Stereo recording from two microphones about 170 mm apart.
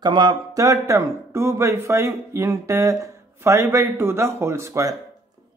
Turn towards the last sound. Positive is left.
turn(degrees=-20)  # may be behind; listen again after turning